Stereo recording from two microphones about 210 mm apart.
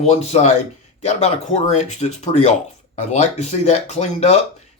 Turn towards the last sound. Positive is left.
turn(degrees=30)  # may be behind; listen again after turning